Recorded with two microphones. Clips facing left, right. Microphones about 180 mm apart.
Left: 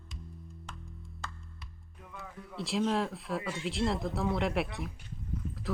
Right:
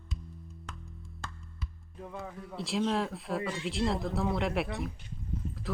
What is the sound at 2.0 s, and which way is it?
Music, 35° right (ahead or behind).